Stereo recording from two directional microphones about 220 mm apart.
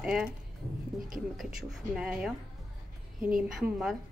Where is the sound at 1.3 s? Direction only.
5° right (ahead or behind).